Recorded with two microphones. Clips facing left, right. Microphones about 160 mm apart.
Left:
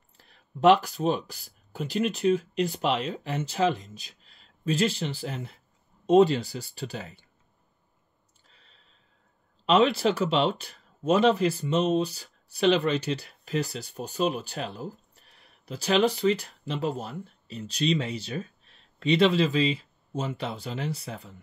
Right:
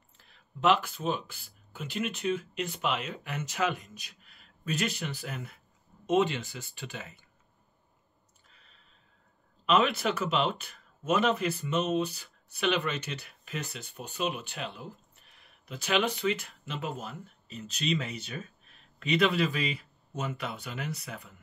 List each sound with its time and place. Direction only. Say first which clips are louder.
0.2 s speech: left 7 dB; 40° left (ahead or behind)
8.5 s clicking: left 2 dB; 30° left (ahead or behind)
9.7 s speech: left 5 dB; 30° left (ahead or behind)